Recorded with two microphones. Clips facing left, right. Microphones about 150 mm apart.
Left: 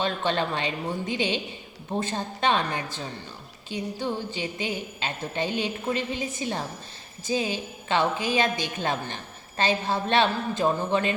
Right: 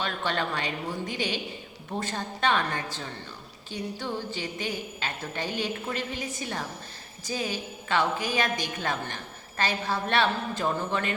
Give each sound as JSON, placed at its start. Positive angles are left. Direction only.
{"t": 0.0, "sound": "a woman's voice", "side_deg": 20}